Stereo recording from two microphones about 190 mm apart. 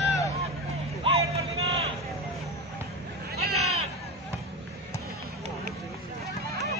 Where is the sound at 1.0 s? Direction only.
30° right (ahead or behind).